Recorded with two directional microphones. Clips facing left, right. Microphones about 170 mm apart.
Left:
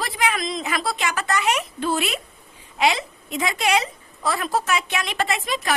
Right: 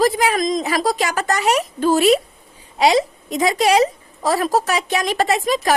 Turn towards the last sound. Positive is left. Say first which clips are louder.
# right 7 dB
turn(degrees=-40)  # may be behind; listen again after turning